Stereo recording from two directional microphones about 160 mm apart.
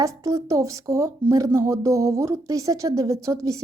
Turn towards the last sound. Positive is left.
turn(degrees=-20)  # may be behind; listen again after turning